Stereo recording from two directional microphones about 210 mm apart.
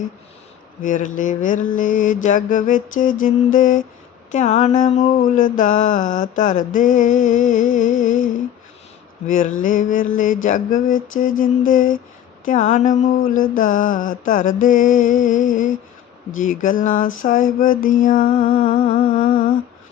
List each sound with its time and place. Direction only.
0.8 s mantra: 35° left (ahead or behind)